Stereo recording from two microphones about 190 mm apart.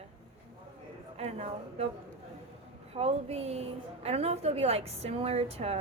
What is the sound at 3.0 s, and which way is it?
A woman's voice, 35° right (ahead or behind).